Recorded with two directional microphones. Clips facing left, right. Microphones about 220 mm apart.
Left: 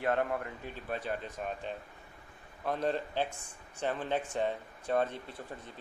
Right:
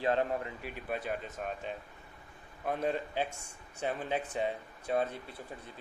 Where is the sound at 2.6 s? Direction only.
10° right (ahead or behind).